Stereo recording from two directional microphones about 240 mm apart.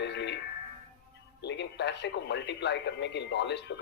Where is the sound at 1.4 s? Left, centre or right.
Left.